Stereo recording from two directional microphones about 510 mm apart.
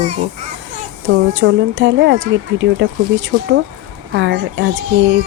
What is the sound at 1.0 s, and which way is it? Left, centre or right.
Speech, right.